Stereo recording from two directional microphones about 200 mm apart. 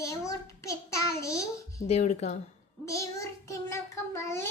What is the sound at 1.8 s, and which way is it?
Speech, 35° left (ahead or behind).